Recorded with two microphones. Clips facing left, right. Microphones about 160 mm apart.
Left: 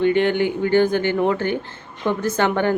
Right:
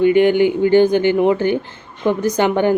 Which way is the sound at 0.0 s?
10° right (ahead or behind).